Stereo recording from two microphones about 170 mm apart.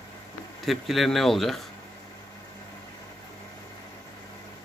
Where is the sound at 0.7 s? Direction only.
Centre (ahead or behind).